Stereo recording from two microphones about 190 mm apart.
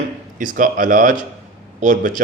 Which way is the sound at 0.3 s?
45° right (ahead or behind).